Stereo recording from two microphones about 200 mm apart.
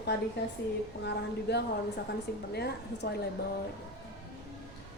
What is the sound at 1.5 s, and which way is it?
Speech, 60° left (ahead or behind).